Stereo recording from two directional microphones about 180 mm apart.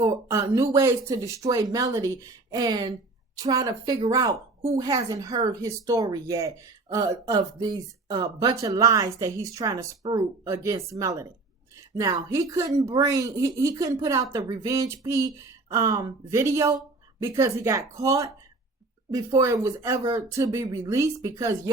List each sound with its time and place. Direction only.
0.0 s speech: 15° right (ahead or behind)